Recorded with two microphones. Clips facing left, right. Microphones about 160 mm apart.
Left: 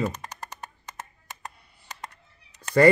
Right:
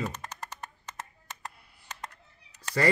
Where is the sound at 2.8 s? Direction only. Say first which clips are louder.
Left 9 dB; 50° left (ahead or behind).